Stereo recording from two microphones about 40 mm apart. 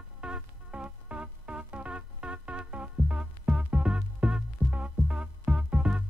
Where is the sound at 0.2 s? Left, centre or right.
Right.